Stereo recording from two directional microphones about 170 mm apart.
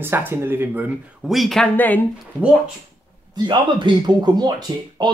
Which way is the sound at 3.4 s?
25° right (ahead or behind).